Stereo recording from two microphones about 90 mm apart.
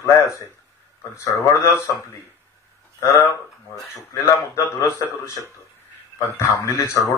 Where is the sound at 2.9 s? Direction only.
35° left (ahead or behind).